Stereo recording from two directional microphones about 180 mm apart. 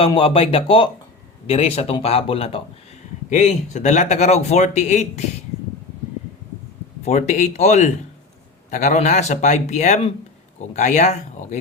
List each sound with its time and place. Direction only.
0.0 s speech: 30° left (ahead or behind)
7.0 s speech: 40° left (ahead or behind)